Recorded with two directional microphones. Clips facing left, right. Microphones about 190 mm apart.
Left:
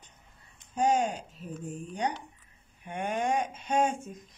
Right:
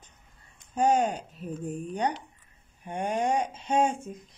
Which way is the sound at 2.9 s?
30° right (ahead or behind).